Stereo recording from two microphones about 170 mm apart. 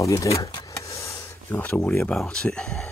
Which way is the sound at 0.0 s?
20° left (ahead or behind).